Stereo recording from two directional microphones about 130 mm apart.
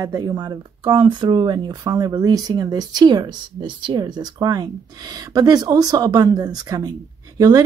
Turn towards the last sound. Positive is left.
turn(degrees=-30)  # may be behind; listen again after turning